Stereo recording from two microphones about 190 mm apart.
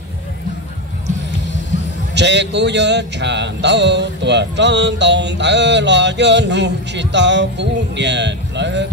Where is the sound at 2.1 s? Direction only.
65° right (ahead or behind).